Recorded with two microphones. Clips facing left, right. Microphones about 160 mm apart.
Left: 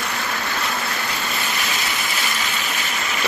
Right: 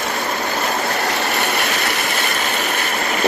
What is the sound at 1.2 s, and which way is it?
Vehicle, 65° right (ahead or behind).